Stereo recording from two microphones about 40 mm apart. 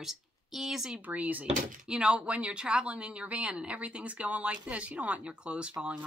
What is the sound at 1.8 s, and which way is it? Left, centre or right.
A woman's voice, right.